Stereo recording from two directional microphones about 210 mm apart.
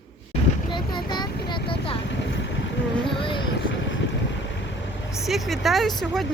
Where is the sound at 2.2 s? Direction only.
60° left (ahead or behind).